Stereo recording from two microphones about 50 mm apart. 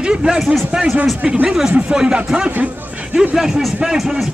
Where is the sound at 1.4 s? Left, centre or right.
Centre.